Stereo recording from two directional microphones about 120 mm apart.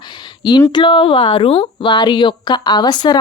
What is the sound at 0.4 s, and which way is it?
Speech, 35° left (ahead or behind).